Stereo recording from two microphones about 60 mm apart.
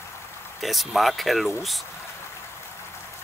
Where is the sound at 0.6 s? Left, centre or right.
Centre.